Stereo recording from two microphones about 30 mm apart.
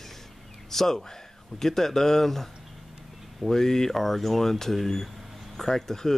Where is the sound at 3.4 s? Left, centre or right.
Centre.